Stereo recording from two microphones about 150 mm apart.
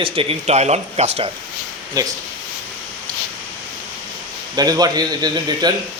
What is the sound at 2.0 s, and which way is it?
Speech, 25° right (ahead or behind).